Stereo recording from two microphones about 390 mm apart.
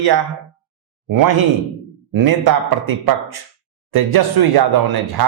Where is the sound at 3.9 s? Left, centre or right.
Right.